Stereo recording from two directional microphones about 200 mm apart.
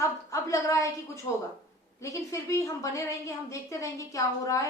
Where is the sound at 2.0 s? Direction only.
15° left (ahead or behind).